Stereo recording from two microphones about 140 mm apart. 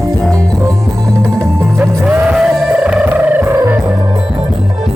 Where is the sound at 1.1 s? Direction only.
5° left (ahead or behind).